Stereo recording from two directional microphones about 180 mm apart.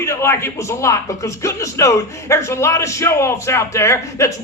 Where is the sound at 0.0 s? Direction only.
15° left (ahead or behind).